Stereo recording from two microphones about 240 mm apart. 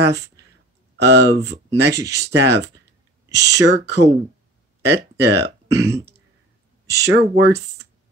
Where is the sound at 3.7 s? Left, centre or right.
Right.